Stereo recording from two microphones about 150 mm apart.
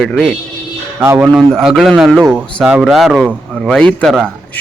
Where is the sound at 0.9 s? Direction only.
15° right (ahead or behind).